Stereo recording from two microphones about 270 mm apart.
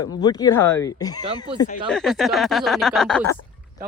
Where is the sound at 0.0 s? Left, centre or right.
Centre.